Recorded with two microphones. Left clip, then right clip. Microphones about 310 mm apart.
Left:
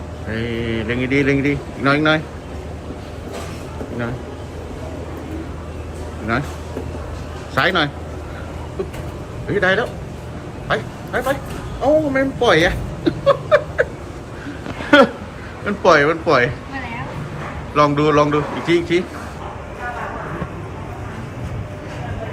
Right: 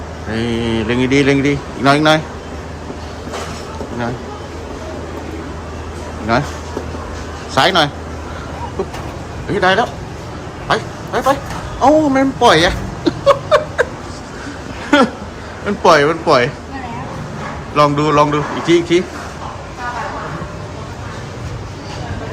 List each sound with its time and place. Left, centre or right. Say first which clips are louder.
0.3 s speech: right 5 dB; centre
6.3 s a man's voice: right 6 dB; centre
7.5 s speech: right 5 dB; centre
9.5 s a man's voice: right 4 dB; centre
11.8 s a sound: right 5 dB; centre
14.8 s a sound: left 1 dB; centre
15.6 s a man's voice: right 3 dB; centre
17.7 s a man's voice: right 3 dB; centre